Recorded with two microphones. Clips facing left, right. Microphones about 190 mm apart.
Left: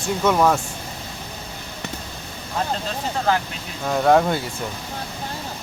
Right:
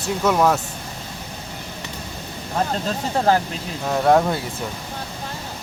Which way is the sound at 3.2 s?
40° right (ahead or behind).